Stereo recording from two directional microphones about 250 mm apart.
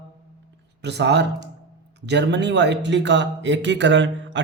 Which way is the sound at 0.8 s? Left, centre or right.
Right.